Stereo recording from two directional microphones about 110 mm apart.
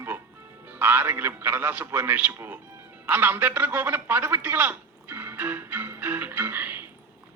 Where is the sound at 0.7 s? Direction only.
20° right (ahead or behind).